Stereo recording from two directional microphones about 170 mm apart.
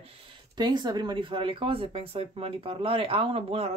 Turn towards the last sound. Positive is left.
turn(degrees=-35)  # may be behind; listen again after turning